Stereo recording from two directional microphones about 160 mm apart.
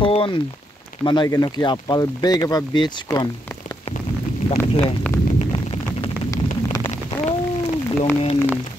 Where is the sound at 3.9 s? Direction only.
40° left (ahead or behind).